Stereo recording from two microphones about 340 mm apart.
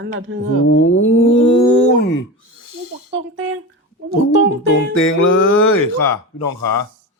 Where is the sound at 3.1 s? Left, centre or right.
Right.